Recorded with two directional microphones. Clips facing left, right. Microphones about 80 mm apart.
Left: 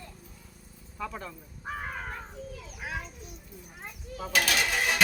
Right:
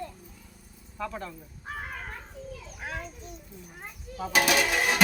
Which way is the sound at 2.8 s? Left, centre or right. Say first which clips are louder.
Even; centre.